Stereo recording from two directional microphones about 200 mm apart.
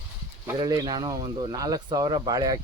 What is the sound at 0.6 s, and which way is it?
Speech, 20° right (ahead or behind).